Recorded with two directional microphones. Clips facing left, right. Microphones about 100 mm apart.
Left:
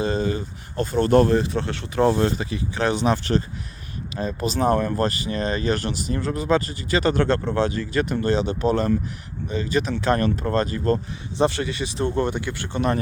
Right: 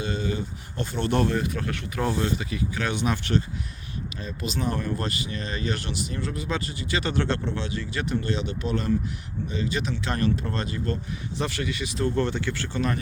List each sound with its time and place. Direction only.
0.0 s a sound: 35° left (ahead or behind)
1.4 s speech: 30° left (ahead or behind); by 10.9 s 45° left (ahead or behind)
11.3 s speech: 30° left (ahead or behind)